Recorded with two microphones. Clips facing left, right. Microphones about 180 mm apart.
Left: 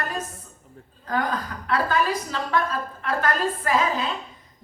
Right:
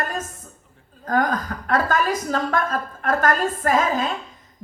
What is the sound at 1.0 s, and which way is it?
A woman's voice, 45° right (ahead or behind).